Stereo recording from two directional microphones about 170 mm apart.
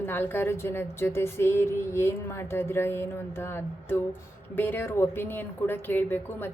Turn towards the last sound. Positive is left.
turn(degrees=10)  # may be behind; listen again after turning